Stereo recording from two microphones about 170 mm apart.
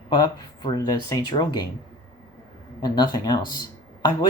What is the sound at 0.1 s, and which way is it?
Speech, 25° left (ahead or behind).